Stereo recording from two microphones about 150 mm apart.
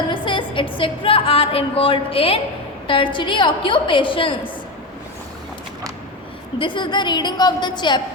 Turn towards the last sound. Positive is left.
turn(degrees=30)  # may be behind; listen again after turning